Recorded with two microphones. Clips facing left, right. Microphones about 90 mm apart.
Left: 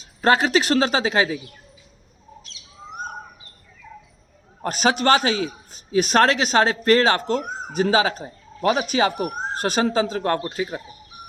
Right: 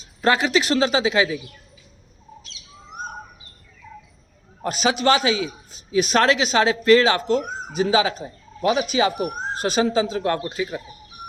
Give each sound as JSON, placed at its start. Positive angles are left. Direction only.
{"t": 0.2, "sound": "a man's voice", "side_deg": 45}
{"t": 4.6, "sound": "a man's voice", "side_deg": 50}